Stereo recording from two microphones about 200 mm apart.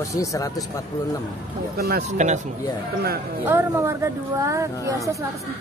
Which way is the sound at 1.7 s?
50° right (ahead or behind).